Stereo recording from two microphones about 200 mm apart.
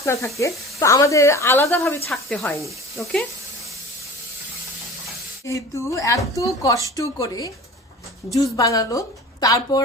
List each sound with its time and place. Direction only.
0.0 s speech: 15° left (ahead or behind)
5.5 s speech: 15° left (ahead or behind)